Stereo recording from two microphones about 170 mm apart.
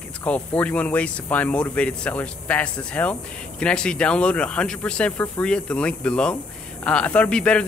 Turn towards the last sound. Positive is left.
turn(degrees=5)  # may be behind; listen again after turning